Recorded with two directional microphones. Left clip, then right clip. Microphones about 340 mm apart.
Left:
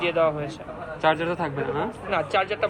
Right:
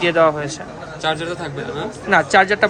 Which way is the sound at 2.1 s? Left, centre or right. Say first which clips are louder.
Right 12 dB; right.